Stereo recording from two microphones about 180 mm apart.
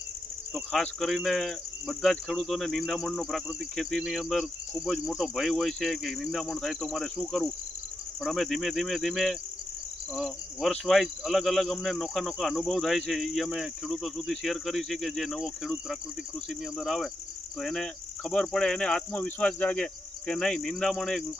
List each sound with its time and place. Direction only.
0.5 s speech: centre (ahead or behind)